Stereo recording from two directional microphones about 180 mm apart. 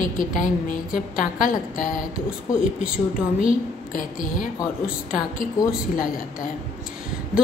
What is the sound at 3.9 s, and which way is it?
Speech, 50° left (ahead or behind).